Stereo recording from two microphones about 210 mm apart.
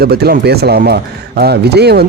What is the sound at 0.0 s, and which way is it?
Speech, 50° right (ahead or behind).